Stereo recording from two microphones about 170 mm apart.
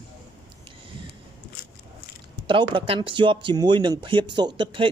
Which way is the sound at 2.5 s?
30° right (ahead or behind).